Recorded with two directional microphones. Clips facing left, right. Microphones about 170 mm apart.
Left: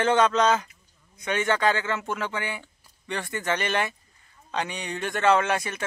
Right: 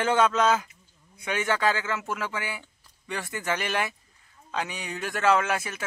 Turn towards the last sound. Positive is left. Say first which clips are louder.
# left 2 dB
turn(degrees=-5)  # may be behind; listen again after turning